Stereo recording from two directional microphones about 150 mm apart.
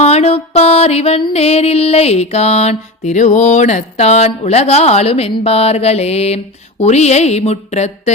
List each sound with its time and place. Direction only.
0.0 s music: 45° left (ahead or behind)